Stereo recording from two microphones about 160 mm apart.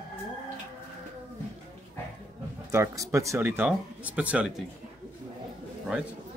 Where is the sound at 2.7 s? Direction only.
20° right (ahead or behind).